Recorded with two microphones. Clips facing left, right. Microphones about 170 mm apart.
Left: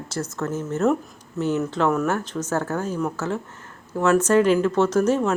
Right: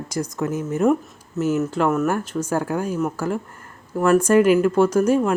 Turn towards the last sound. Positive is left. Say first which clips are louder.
# right 2 dB
turn(degrees=-10)  # may be behind; listen again after turning